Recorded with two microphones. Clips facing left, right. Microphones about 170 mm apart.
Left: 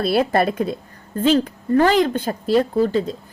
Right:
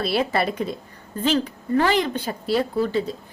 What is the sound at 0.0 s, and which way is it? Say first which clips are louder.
A woman's voice: left 4 dB; 50° left (ahead or behind).